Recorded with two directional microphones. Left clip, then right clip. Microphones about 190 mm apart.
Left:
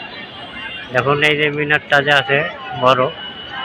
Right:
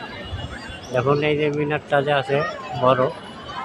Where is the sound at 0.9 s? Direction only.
Centre (ahead or behind).